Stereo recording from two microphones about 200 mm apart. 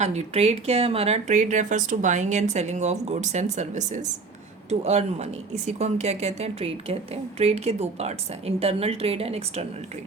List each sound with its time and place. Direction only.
0.0 s speech: 35° right (ahead or behind)